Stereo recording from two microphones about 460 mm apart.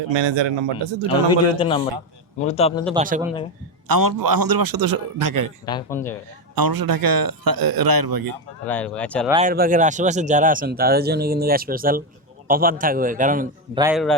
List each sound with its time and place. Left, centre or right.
0.1 s a man's voice: right
1.5 s a man's voice: centre
2.9 s speech: centre
3.8 s speech: right
5.6 s speech: centre
6.6 s speech: right
8.6 s speech: centre
9.3 s speech: centre
13.8 s speech: centre